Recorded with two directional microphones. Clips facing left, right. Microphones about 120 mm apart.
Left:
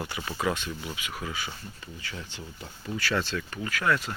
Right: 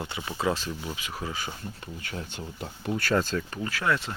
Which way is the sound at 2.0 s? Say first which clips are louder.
Right 3 dB; 50° right (ahead or behind).